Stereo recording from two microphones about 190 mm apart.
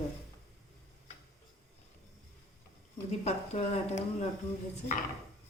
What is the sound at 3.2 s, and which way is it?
Speech, 35° left (ahead or behind).